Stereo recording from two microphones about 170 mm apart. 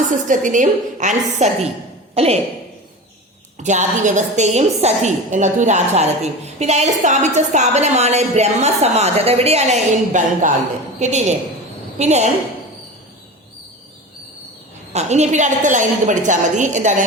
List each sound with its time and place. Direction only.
0.1 s a woman's voice: 50° right (ahead or behind)
3.6 s a woman's voice: 45° right (ahead or behind)
14.9 s a woman's voice: 40° right (ahead or behind)